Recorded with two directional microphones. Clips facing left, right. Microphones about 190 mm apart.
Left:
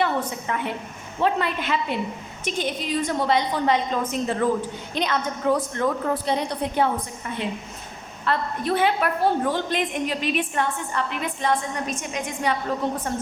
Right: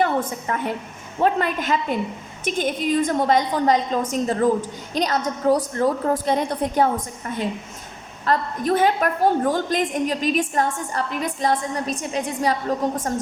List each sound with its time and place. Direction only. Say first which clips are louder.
0.4 s a woman's voice: right 2 dB; 45° right (ahead or behind)
8.2 s a woman's voice: right 3 dB; 40° right (ahead or behind)